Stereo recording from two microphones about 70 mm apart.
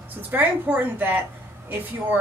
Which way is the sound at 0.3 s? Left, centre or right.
Right.